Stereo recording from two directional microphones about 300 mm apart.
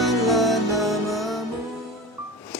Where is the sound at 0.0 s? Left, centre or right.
Centre.